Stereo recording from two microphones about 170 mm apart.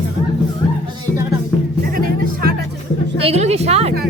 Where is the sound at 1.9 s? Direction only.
60° right (ahead or behind).